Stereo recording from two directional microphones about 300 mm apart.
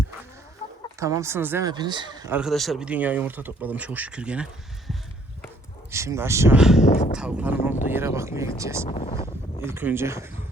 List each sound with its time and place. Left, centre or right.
0.9 s speech: centre
5.9 s speech: centre
6.8 s speech: left
7.2 s speech: centre
8.9 s speech: left
9.6 s speech: centre